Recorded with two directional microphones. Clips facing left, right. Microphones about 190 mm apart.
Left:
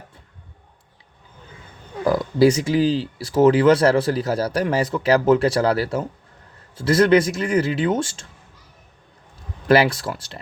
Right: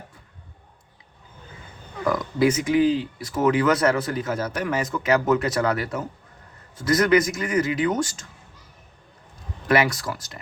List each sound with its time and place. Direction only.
2.0 s speech: 30° left (ahead or behind)
9.6 s speech: 30° left (ahead or behind)